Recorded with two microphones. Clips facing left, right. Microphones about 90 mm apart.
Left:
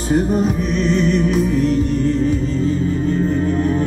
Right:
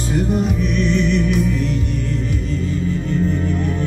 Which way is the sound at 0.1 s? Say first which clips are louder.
Left 3 dB; 40° left (ahead or behind).